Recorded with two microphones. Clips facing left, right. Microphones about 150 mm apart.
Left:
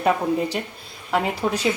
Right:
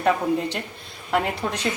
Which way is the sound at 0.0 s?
5° left (ahead or behind).